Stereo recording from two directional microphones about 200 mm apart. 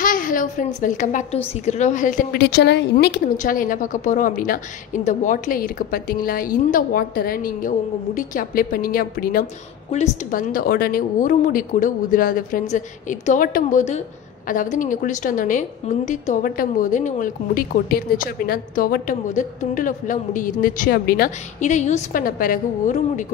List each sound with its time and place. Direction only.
0.0 s a sound: 40° left (ahead or behind)
0.7 s a woman's voice: 40° left (ahead or behind)
9.8 s a woman's voice: 35° left (ahead or behind)